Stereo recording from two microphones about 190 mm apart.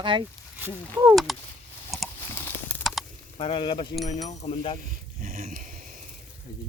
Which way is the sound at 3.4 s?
30° left (ahead or behind).